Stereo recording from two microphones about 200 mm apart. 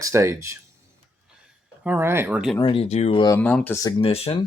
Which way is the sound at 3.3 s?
5° left (ahead or behind).